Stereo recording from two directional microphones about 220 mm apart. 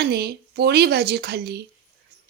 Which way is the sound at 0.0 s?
45° right (ahead or behind).